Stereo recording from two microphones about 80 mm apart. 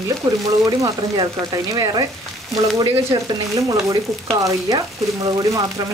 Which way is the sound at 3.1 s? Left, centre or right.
Right.